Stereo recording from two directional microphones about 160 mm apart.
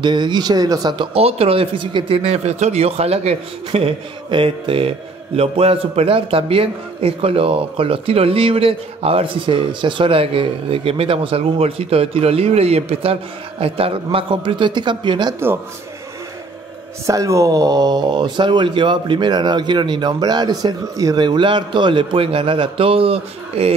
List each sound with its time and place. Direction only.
0.0 s speech: 30° right (ahead or behind)
1.1 s speech: 40° right (ahead or behind)
17.0 s speech: 20° right (ahead or behind); by 23.7 s 35° right (ahead or behind)